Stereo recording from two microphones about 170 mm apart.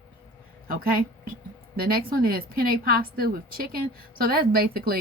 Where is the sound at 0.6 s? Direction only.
60° right (ahead or behind).